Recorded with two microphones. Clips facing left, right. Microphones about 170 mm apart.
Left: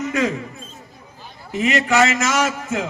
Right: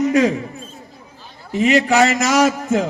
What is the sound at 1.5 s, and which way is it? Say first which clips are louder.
A man's voice: right 3 dB; 35° right (ahead or behind).